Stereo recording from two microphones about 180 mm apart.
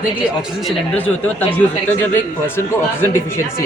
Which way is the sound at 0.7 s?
10° left (ahead or behind).